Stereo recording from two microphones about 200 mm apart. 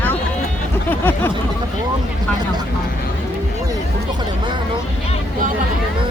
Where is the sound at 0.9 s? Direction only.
10° left (ahead or behind).